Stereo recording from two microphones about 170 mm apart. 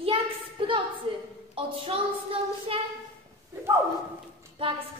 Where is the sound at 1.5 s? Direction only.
30° right (ahead or behind).